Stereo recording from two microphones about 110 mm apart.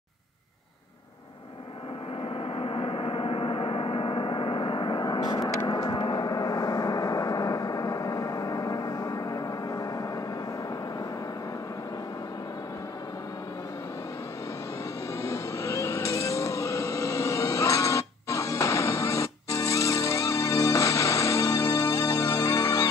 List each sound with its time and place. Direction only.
2.5 s gong: 60° left (ahead or behind); by 10.0 s 35° left (ahead or behind)
15.2 s vehicle: 30° left (ahead or behind)